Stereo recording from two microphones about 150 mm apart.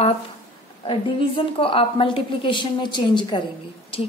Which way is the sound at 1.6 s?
35° left (ahead or behind).